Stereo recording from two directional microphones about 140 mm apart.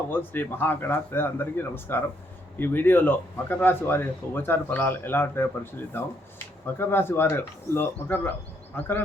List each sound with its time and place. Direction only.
0.1 s speech: 15° left (ahead or behind)
6.7 s speech: 15° left (ahead or behind)